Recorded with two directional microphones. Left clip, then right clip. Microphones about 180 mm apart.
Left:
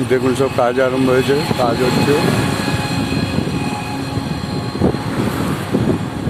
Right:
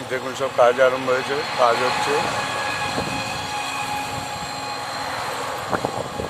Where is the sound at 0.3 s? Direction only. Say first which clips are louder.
Left 2 dB; 20° left (ahead or behind).